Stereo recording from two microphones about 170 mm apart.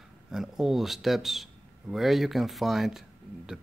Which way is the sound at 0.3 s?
Centre (ahead or behind).